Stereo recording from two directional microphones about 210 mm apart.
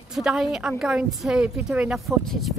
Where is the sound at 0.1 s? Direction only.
Centre (ahead or behind).